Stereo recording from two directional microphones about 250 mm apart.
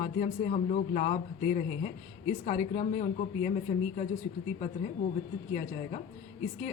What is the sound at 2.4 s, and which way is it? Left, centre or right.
Speech, left.